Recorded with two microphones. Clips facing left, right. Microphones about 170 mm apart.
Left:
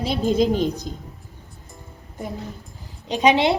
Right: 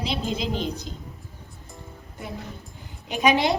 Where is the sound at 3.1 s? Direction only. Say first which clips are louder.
Left 3 dB; 30° left (ahead or behind).